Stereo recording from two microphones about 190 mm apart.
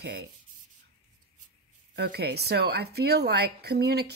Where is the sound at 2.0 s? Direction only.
60° right (ahead or behind).